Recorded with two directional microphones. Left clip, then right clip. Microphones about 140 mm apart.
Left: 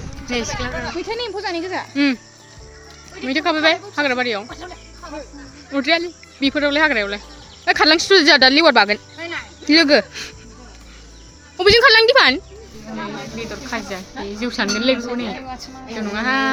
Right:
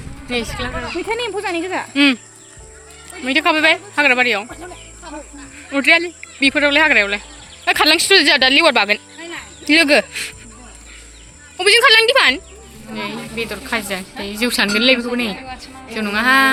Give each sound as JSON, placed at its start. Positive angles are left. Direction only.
{"t": 0.3, "sound": "speech", "side_deg": -20}
{"t": 1.0, "sound": "speech", "side_deg": -60}
{"t": 1.9, "sound": "speech", "side_deg": -10}
{"t": 3.2, "sound": "speech", "side_deg": 0}
{"t": 5.7, "sound": "speech", "side_deg": -5}
{"t": 7.9, "sound": "speech", "side_deg": 25}
{"t": 10.1, "sound": "speech", "side_deg": 35}
{"t": 11.5, "sound": "speech", "side_deg": 40}
{"t": 13.0, "sound": "a woman's voice", "side_deg": -35}